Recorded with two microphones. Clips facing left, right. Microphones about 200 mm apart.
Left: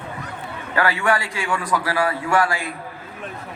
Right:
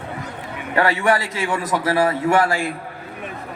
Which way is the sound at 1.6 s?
25° right (ahead or behind).